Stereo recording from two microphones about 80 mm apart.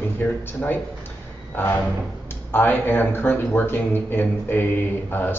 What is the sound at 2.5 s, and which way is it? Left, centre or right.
Speech, left.